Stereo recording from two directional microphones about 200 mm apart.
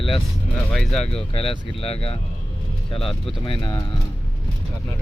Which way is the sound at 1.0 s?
30° left (ahead or behind).